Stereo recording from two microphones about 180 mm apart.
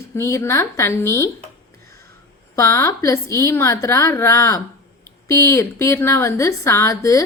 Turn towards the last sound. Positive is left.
turn(degrees=20)  # may be behind; listen again after turning